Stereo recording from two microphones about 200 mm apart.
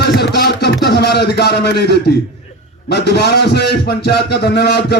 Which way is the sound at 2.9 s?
55° left (ahead or behind).